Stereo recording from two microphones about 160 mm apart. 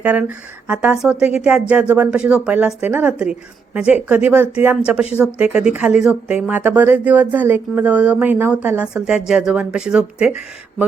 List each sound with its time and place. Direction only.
0.0 s speech: 10° right (ahead or behind)